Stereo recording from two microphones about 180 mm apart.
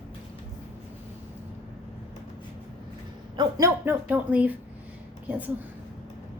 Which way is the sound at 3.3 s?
20° right (ahead or behind).